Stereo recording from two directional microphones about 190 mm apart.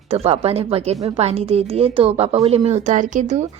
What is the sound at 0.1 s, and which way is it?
A woman's voice, 30° right (ahead or behind).